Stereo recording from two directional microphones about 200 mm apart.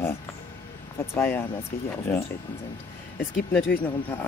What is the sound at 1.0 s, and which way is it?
Speech, 10° left (ahead or behind).